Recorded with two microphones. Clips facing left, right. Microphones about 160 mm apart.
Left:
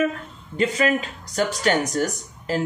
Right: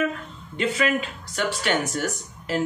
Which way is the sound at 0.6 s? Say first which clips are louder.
Left 3 dB; 35° left (ahead or behind).